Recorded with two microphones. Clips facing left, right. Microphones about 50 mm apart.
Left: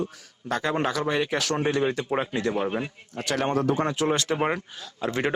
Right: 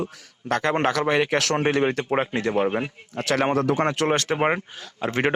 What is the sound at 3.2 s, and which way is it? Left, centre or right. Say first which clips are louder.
Speech: right 4 dB; right.